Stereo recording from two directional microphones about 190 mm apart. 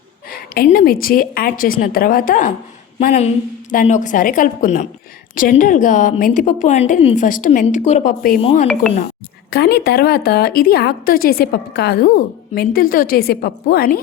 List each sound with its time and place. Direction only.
0.3 s a woman's voice: 50° left (ahead or behind)
8.4 s speech: 30° left (ahead or behind)
8.6 s speech: 5° left (ahead or behind)
9.5 s a woman's voice: 60° left (ahead or behind)